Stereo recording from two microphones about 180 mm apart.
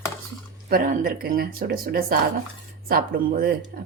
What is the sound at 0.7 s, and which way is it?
A woman's voice, 55° right (ahead or behind).